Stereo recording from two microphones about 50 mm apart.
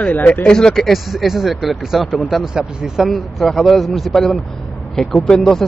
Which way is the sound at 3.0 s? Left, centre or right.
Centre.